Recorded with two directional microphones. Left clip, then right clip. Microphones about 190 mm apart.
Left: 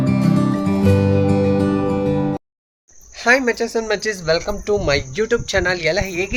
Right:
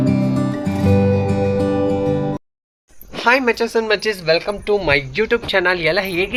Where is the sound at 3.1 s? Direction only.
5° left (ahead or behind).